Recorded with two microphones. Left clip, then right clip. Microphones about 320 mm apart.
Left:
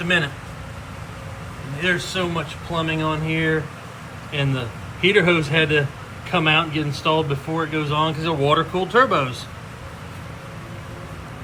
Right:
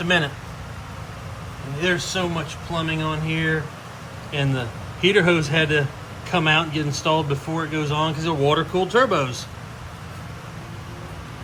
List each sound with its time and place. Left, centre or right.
0.0 s speech: centre
1.8 s speech: centre